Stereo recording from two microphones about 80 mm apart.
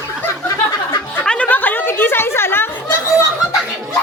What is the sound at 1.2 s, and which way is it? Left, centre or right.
Chatter, centre.